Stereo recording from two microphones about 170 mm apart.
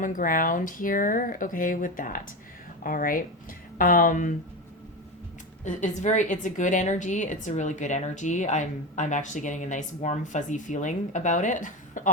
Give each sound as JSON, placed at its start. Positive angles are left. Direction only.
{"t": 0.0, "sound": "a woman's voice", "side_deg": 55}
{"t": 5.6, "sound": "a woman's voice", "side_deg": 45}